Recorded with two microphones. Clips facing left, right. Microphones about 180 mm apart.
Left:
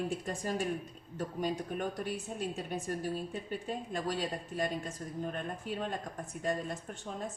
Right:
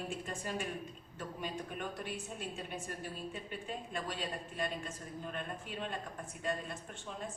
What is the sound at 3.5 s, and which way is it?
A woman's voice, 40° left (ahead or behind).